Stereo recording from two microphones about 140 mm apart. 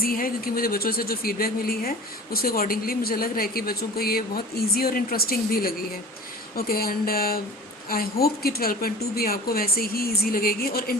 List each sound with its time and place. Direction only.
0.0 s a woman's voice: 90° left